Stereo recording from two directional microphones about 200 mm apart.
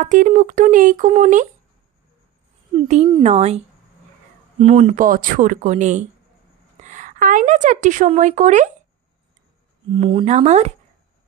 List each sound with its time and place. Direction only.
0.0 s speech: 40° right (ahead or behind)
3.1 s a woman's voice: 30° right (ahead or behind)
9.8 s speech: 25° right (ahead or behind)